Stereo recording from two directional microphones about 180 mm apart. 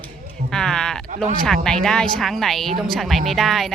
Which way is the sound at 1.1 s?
45° right (ahead or behind).